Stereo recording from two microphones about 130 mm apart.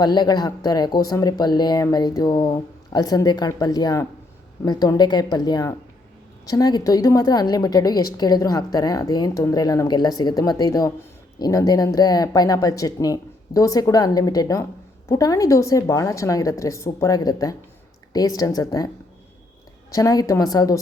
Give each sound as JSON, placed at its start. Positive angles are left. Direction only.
{"t": 0.0, "sound": "a woman's voice", "side_deg": 30}
{"t": 19.9, "sound": "a woman's voice", "side_deg": 25}